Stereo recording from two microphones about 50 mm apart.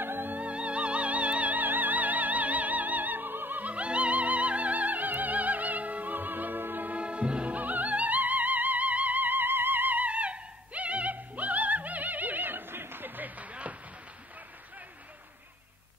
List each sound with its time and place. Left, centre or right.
0.0 s music: right
0.4 s music: right